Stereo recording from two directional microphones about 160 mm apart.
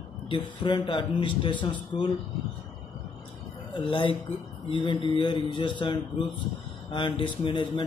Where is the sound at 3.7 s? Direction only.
30° left (ahead or behind).